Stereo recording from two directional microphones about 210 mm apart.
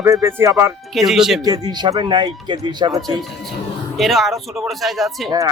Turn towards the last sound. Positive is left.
turn(degrees=0)  # may be behind; listen again after turning